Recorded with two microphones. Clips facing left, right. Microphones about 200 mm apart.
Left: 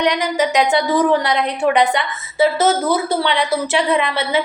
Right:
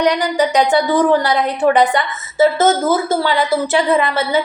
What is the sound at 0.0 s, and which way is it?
A woman's voice, centre (ahead or behind).